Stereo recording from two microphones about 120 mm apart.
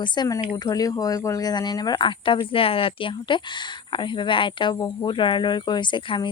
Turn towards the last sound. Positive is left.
turn(degrees=40)  # may be behind; listen again after turning